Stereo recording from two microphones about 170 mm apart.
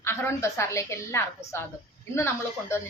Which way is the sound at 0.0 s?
15° left (ahead or behind).